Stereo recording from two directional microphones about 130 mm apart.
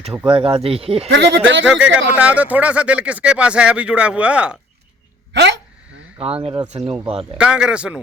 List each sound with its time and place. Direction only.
0.3 s speech: 40° right (ahead or behind)
1.4 s speech: 10° right (ahead or behind)
6.1 s speech: 50° right (ahead or behind)
6.7 s speech: 60° right (ahead or behind)
7.1 s speech: 50° right (ahead or behind)
7.3 s speech: 5° right (ahead or behind)